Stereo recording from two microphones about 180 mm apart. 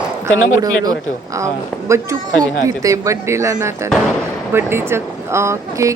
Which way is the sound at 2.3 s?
20° right (ahead or behind).